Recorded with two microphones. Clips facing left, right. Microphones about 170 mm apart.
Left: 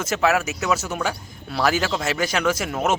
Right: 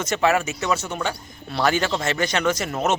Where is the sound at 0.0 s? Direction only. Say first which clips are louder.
Even; 5° left (ahead or behind).